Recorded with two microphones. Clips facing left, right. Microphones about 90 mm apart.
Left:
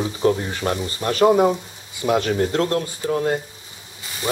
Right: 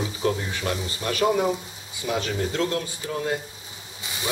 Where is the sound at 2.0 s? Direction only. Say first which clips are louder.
Left 7 dB; 55° left (ahead or behind).